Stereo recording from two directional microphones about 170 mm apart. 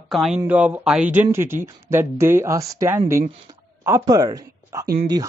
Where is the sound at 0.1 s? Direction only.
Centre (ahead or behind).